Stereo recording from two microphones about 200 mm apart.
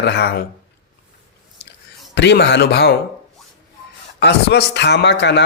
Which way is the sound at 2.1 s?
60° left (ahead or behind).